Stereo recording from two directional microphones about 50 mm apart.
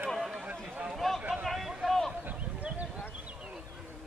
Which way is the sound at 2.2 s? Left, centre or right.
Right.